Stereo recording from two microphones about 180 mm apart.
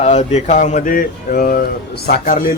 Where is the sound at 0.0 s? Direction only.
40° left (ahead or behind).